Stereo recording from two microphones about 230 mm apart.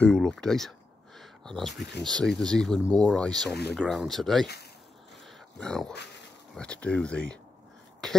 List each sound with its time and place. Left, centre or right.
0.0 s a sound: centre
1.8 s speech: left
2.0 s speech: centre
5.6 s speech: centre